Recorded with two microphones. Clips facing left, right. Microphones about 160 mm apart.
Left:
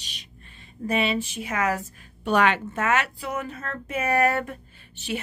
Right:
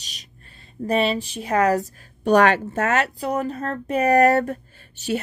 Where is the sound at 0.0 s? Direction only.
40° right (ahead or behind).